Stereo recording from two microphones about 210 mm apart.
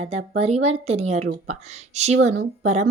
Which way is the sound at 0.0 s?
30° right (ahead or behind).